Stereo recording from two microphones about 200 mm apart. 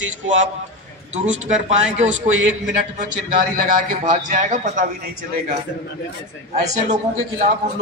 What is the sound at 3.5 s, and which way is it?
A man's voice, 40° right (ahead or behind).